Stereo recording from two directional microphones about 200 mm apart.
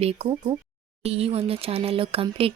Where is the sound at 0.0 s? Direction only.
30° right (ahead or behind).